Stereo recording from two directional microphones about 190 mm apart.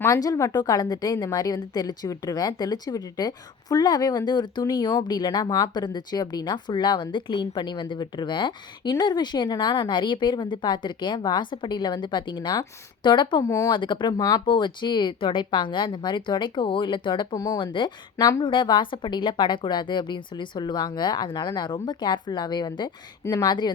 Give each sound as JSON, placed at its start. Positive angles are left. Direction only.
{"t": 0.0, "sound": "a woman's voice", "side_deg": 20}